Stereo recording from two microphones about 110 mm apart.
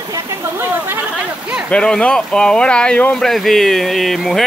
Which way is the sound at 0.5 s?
20° right (ahead or behind).